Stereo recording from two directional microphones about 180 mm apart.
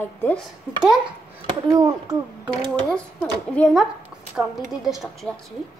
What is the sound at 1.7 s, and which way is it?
Speech, 20° right (ahead or behind).